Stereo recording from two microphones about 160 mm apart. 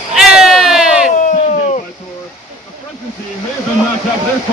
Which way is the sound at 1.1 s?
50° left (ahead or behind).